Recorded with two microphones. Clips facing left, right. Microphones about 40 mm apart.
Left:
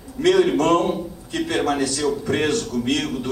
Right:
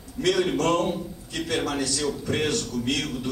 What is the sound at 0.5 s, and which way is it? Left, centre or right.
A man's voice, left.